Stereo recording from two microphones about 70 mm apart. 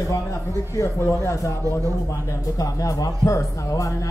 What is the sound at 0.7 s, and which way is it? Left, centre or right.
Speech, left.